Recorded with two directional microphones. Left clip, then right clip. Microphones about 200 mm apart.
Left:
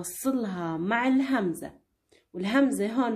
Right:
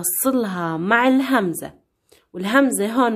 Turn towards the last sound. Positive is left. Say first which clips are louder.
# right 8 dB
turn(degrees=-40)  # may be behind; listen again after turning